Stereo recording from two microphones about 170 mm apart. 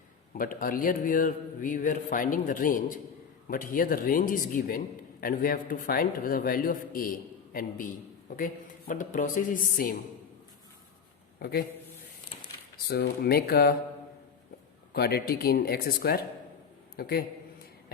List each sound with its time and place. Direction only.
0.3 s a man's voice: 55° left (ahead or behind)
11.3 s a man's voice: 65° left (ahead or behind)
12.9 s speech: 70° left (ahead or behind)
14.9 s a man's voice: 65° left (ahead or behind)